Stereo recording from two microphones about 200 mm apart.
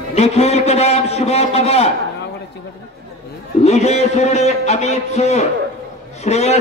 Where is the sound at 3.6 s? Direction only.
30° left (ahead or behind).